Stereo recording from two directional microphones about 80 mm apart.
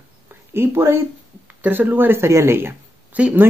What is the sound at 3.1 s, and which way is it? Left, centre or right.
Speech, centre.